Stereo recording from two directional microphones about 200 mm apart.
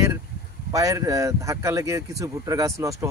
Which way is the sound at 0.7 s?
15° right (ahead or behind).